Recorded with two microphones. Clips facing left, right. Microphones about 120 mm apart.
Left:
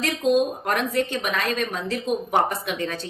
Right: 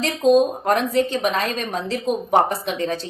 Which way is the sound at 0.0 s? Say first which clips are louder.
Right 5 dB; 30° right (ahead or behind).